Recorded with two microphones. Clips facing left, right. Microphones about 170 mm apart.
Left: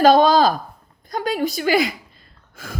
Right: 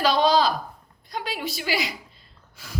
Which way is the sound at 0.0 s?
50° left (ahead or behind).